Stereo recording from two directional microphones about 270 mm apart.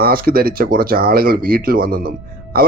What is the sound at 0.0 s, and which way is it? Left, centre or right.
Speech, right.